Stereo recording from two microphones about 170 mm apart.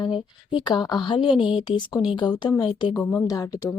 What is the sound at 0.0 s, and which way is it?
Speech, 25° left (ahead or behind).